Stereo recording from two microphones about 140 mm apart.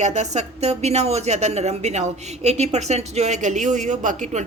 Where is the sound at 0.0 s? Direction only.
55° right (ahead or behind).